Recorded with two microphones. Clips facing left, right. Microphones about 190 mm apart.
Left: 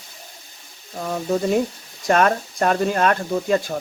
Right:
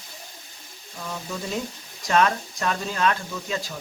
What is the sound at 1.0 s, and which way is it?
Speech, 50° left (ahead or behind).